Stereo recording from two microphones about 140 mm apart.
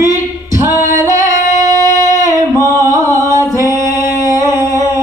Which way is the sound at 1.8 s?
65° left (ahead or behind).